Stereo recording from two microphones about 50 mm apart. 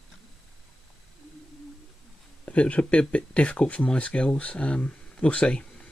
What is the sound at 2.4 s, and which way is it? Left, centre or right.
Speech, left.